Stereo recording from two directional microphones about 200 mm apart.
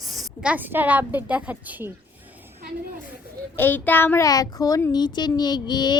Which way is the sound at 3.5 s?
10° left (ahead or behind).